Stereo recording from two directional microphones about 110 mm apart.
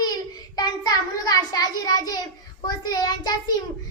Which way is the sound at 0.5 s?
35° left (ahead or behind).